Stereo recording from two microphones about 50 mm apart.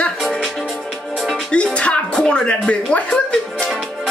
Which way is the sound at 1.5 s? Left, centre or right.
Left.